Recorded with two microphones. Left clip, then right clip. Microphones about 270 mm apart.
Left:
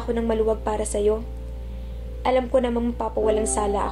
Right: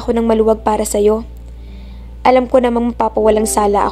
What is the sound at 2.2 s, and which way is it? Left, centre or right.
A woman's voice, right.